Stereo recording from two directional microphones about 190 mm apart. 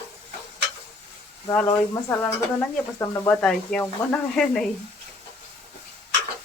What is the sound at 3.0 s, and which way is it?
Speech, 15° left (ahead or behind).